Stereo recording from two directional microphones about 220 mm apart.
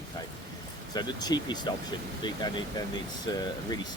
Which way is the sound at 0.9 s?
20° left (ahead or behind).